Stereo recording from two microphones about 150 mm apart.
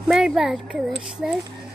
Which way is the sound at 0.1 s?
5° right (ahead or behind).